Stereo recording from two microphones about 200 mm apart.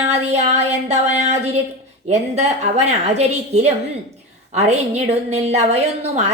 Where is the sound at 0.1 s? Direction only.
35° right (ahead or behind).